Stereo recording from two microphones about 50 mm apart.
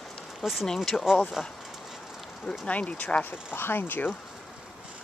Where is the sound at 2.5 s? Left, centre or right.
Left.